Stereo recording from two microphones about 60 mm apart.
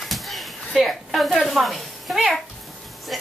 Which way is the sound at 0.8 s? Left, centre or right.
Centre.